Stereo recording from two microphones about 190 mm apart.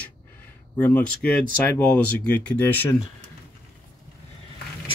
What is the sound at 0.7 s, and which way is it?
Speech, 10° left (ahead or behind).